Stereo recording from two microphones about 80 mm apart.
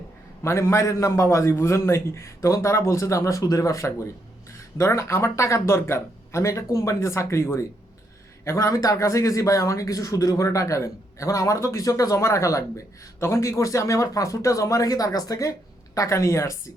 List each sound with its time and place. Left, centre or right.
0.4 s a man's voice: left
8.5 s a man's voice: left